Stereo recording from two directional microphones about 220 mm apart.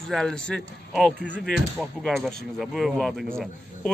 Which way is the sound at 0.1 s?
Centre (ahead or behind).